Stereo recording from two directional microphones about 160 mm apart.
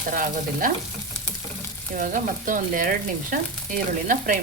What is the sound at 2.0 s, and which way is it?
Frying, 55° right (ahead or behind).